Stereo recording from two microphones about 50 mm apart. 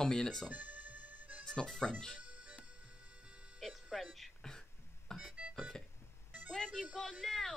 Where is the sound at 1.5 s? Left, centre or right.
Centre.